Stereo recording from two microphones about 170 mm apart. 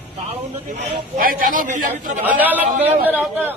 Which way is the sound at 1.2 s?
55° right (ahead or behind).